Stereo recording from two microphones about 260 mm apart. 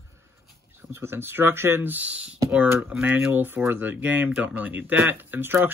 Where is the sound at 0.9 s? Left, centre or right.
Centre.